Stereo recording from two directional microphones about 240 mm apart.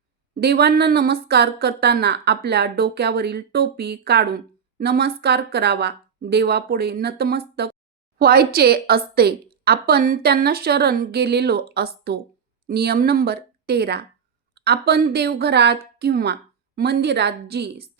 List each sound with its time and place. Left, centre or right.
0.3 s a woman's voice: right